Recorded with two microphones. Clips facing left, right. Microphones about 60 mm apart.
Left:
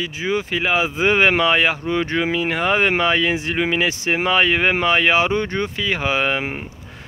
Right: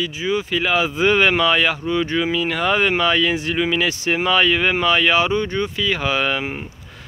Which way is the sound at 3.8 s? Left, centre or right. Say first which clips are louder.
Even; left.